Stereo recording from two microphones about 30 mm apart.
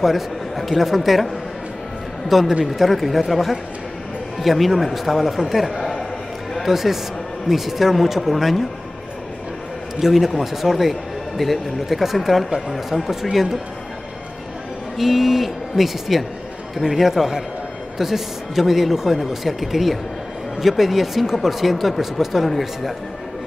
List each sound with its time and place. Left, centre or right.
0.0 s speech: centre
2.6 s speech: centre
2.9 s speech: centre
9.9 s speech: centre
12.0 s speech: centre
12.4 s speech: centre
12.7 s speech: centre
15.0 s speech: centre